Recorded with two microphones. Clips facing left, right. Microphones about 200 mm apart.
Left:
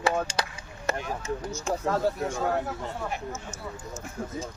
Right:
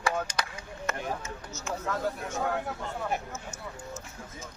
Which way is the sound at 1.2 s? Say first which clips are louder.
Left 9 dB; 15° left (ahead or behind).